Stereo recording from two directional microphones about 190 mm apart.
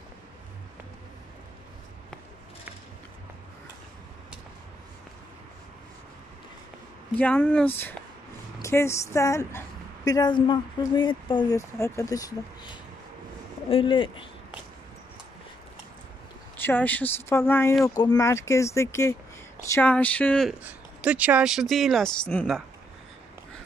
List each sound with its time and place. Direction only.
7.2 s speech: 5° left (ahead or behind); by 14.2 s 25° left (ahead or behind)
16.5 s speech: 10° left (ahead or behind)
20.6 s speech: 5° right (ahead or behind)